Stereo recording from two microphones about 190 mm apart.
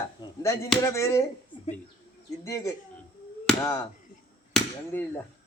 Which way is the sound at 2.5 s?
15° left (ahead or behind).